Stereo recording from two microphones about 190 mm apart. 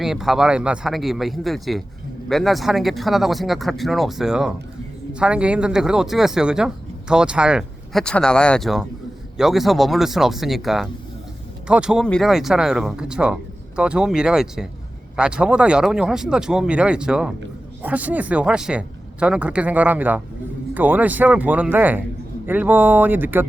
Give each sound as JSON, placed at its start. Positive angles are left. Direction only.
{"t": 0.0, "sound": "speech", "side_deg": 0}